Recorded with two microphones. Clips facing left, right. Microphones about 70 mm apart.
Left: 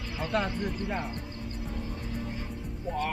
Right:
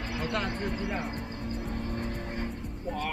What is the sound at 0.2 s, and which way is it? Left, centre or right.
Speech, centre.